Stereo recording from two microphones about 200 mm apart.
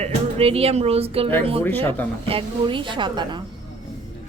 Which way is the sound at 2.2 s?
25° right (ahead or behind).